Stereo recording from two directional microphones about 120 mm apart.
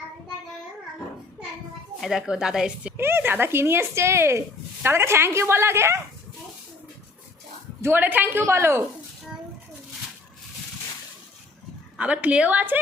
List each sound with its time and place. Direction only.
2.0 s speech: centre (ahead or behind)
3.0 s speech: 20° right (ahead or behind)
7.8 s speech: 20° right (ahead or behind)
11.9 s a woman's voice: 10° right (ahead or behind)